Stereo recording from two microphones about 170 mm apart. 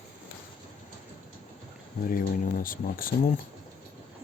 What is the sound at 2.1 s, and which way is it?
Speech, 55° left (ahead or behind).